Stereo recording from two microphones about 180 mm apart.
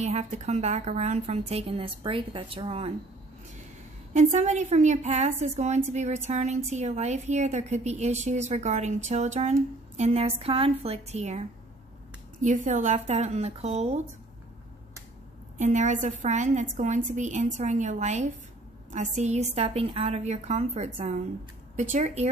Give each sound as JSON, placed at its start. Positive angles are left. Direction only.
{"t": 0.0, "sound": "a woman's voice", "side_deg": -35}
{"t": 4.1, "sound": "a woman's voice", "side_deg": -40}
{"t": 15.5, "sound": "a woman's voice", "side_deg": -40}